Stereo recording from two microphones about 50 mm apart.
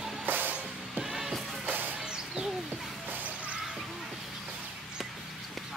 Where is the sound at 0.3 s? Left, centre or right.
Right.